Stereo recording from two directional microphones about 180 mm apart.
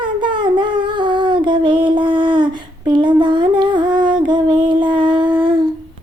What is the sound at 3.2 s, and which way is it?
Humming, 25° right (ahead or behind).